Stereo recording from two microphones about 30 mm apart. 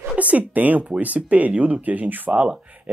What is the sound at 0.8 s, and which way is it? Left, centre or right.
Speech, right.